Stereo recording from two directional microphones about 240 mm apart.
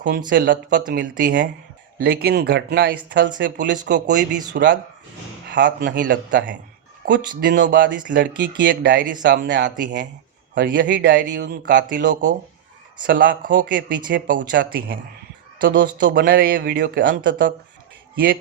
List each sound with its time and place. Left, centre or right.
0.3 s speech: right
3.8 s speech: right
5.6 s speech: right
11.9 s speech: right